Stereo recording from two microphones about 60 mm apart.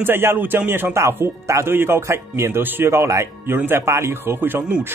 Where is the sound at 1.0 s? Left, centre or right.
Right.